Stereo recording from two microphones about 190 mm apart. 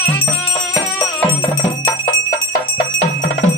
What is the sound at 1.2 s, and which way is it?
Music, 10° left (ahead or behind).